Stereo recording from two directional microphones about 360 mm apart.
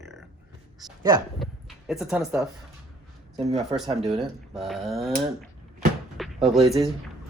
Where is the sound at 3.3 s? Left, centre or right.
Centre.